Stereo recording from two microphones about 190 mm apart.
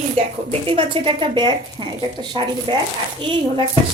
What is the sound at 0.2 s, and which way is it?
A woman's voice, 30° right (ahead or behind).